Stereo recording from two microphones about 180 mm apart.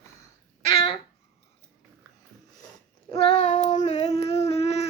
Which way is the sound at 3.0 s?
30° left (ahead or behind).